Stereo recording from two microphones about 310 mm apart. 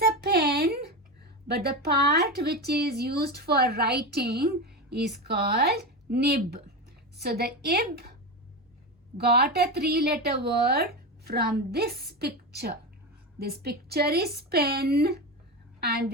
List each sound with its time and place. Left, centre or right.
0.0 s a sound: right
1.5 s speech: right
9.1 s speech: right